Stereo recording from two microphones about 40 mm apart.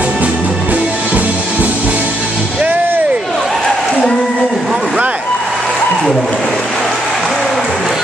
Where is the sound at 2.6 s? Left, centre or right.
Right.